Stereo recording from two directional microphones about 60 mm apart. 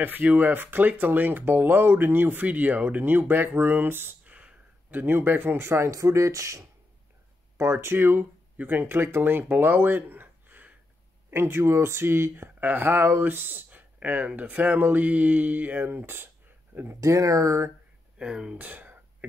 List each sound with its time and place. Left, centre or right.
0.0 s speech: right
4.2 s a sound: right
5.0 s speech: right
7.5 s speech: right
11.2 s speech: right
17.0 s speech: right
18.2 s speech: centre
18.6 s speech: right